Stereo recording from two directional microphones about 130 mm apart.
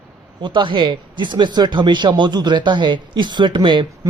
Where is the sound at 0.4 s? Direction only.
40° right (ahead or behind).